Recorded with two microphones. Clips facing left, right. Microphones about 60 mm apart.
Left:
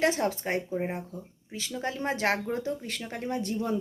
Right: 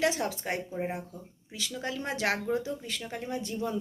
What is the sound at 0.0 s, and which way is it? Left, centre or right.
A woman's voice, left.